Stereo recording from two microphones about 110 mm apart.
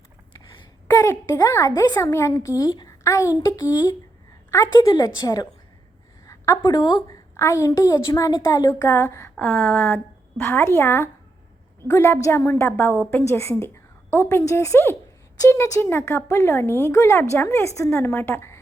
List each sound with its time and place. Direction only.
0.9 s a woman's voice: 25° left (ahead or behind)
8.9 s speech: 25° left (ahead or behind)
9.4 s speech: 10° left (ahead or behind)
10.4 s speech: 25° left (ahead or behind)